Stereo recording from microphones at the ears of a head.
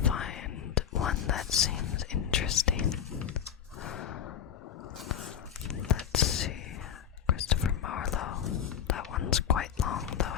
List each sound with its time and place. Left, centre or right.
0.0 s whispering: left
5.0 s whispering: left